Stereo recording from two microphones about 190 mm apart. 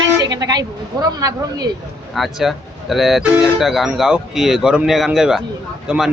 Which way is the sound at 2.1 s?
Centre (ahead or behind).